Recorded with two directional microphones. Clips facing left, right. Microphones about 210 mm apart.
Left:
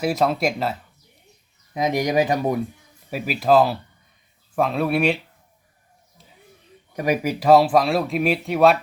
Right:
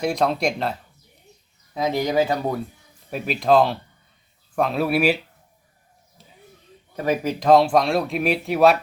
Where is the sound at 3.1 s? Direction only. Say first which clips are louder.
Even; 5° left (ahead or behind).